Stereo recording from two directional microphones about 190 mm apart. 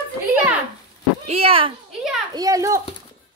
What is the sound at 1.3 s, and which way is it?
Speech, 30° right (ahead or behind).